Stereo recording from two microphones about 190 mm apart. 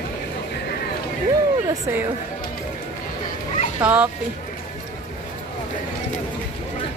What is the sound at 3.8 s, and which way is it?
Speech, 10° right (ahead or behind).